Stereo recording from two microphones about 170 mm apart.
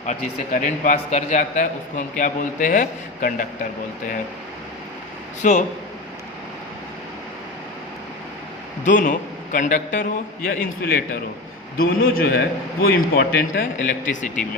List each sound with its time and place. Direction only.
0.0 s a man's voice: 45° left (ahead or behind)
5.4 s a man's voice: 45° left (ahead or behind)
8.8 s a man's voice: 50° left (ahead or behind)